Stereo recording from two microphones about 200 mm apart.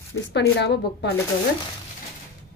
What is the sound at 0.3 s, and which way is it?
Speech, 55° left (ahead or behind).